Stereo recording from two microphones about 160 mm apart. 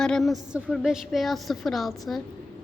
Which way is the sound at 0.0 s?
Centre (ahead or behind).